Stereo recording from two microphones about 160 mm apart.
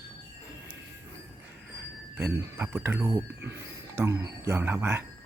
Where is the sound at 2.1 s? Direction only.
15° right (ahead or behind).